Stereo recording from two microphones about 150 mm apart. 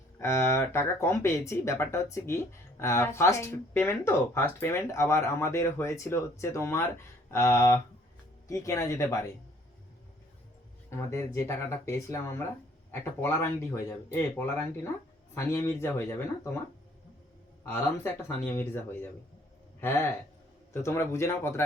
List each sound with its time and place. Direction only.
0.2 s speech: 15° left (ahead or behind)
10.9 s speech: 20° left (ahead or behind)
17.6 s speech: 15° left (ahead or behind)
19.8 s gasp: 15° left (ahead or behind)
20.7 s speech: 20° left (ahead or behind)